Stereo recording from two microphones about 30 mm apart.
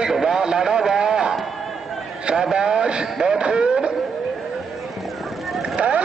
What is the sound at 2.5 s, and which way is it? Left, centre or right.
Speech, right.